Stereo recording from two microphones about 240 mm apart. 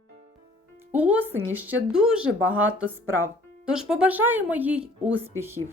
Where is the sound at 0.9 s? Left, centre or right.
Centre.